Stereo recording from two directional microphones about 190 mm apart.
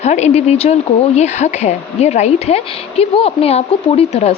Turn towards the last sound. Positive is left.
turn(degrees=30)  # may be behind; listen again after turning